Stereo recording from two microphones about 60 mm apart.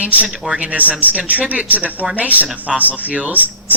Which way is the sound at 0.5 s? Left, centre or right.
Right.